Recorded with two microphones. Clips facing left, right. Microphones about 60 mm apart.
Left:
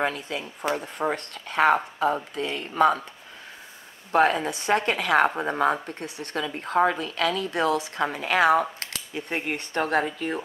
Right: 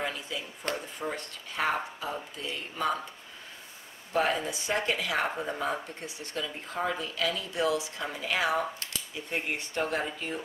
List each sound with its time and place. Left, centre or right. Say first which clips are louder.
0.0 s a woman's voice: left 7 dB; left
4.1 s a woman's voice: left 7 dB; left